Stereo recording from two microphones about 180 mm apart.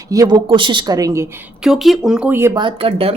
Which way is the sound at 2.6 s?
30° right (ahead or behind).